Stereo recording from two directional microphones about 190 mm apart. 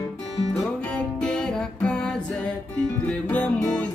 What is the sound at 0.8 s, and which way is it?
Music, 5° left (ahead or behind).